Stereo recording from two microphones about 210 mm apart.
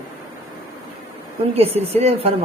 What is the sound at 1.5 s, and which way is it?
Speech, 30° right (ahead or behind).